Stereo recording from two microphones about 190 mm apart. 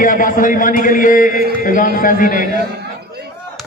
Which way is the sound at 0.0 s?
45° left (ahead or behind).